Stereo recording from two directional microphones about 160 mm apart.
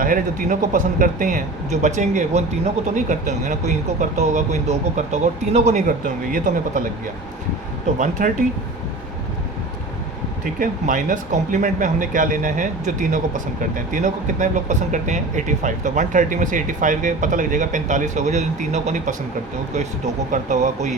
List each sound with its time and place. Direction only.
0.0 s speech: 60° right (ahead or behind)
7.9 s speech: 50° right (ahead or behind)
10.4 s speech: 55° right (ahead or behind)
20.3 s speech: 50° right (ahead or behind)